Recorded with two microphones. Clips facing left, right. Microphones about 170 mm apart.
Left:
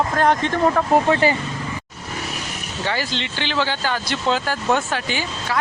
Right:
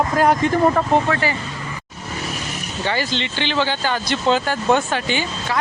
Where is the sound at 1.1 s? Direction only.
25° left (ahead or behind).